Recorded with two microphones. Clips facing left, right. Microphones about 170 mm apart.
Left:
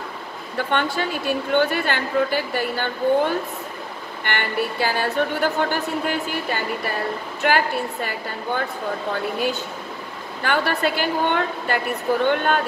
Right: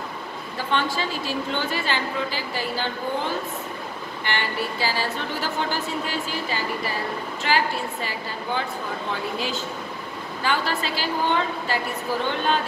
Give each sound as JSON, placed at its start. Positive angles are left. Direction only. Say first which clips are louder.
{"t": 0.6, "sound": "a woman's voice", "louder": "left 3 dB", "side_deg": 60}